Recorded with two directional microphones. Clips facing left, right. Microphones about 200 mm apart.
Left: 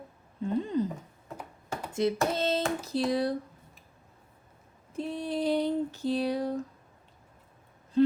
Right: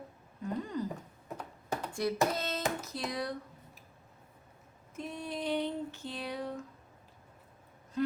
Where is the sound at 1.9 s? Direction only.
20° left (ahead or behind).